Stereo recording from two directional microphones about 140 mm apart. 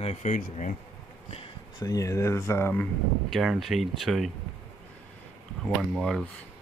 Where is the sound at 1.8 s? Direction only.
25° left (ahead or behind).